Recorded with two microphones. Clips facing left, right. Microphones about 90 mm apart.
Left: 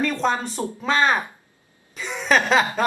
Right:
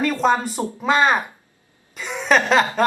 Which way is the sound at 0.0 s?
5° right (ahead or behind).